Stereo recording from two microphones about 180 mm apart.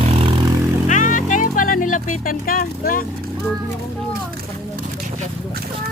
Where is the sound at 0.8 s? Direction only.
45° left (ahead or behind).